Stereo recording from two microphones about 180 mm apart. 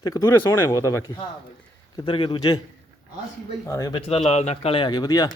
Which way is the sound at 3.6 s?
15° left (ahead or behind).